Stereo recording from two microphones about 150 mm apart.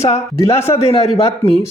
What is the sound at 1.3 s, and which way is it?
Speech, 40° left (ahead or behind).